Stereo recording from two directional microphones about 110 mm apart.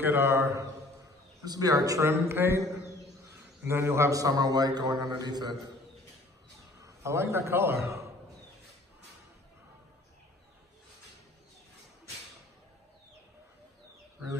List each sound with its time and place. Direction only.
0.0 s a man's voice: 20° right (ahead or behind); by 5.6 s 40° right (ahead or behind)
6.8 s a man's voice: 25° right (ahead or behind)